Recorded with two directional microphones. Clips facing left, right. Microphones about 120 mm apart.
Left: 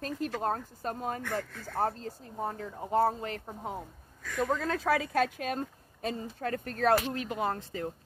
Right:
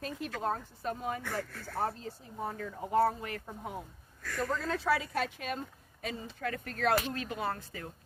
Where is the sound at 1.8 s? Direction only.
45° left (ahead or behind).